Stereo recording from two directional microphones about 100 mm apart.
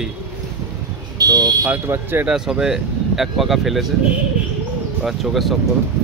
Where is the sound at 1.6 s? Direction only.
20° right (ahead or behind).